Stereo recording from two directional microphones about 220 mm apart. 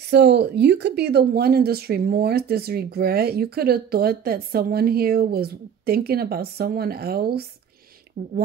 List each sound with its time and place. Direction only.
0.1 s speech: 50° right (ahead or behind)